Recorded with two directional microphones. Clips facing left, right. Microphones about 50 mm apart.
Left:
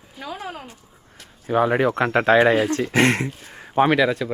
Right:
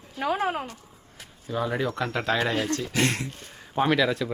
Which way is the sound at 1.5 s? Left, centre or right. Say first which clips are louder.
Left 9 dB; left.